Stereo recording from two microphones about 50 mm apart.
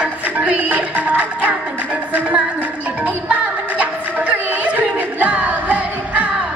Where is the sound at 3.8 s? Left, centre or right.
Right.